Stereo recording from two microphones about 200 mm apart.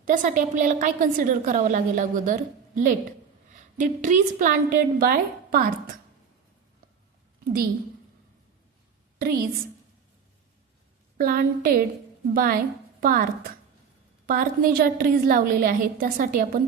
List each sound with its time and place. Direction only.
0.0 s a woman's voice: 40° right (ahead or behind)
9.1 s a woman's voice: 45° right (ahead or behind)
11.2 s a woman's voice: 45° right (ahead or behind)
14.3 s a woman's voice: 45° right (ahead or behind)